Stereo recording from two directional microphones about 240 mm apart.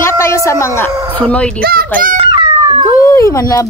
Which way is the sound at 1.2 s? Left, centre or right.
Centre.